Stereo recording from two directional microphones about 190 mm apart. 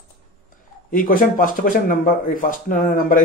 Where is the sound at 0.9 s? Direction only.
45° left (ahead or behind).